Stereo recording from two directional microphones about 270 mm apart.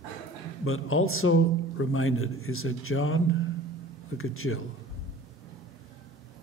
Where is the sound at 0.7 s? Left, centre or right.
Left.